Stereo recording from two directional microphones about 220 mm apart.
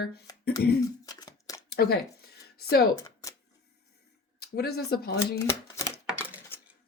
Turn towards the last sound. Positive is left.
turn(degrees=-5)  # may be behind; listen again after turning